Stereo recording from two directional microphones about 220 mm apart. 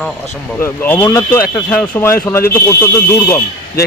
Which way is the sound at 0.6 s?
10° left (ahead or behind).